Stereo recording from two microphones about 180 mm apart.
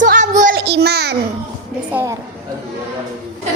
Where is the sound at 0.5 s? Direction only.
65° right (ahead or behind).